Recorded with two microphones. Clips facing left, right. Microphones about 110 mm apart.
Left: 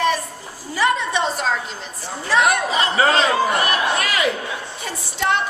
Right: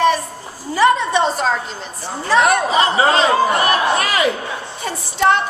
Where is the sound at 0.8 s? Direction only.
35° right (ahead or behind).